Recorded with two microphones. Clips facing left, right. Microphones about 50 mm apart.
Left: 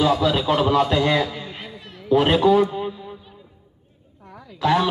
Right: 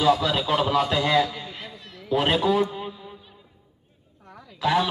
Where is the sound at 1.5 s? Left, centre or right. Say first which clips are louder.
Left 3 dB; centre.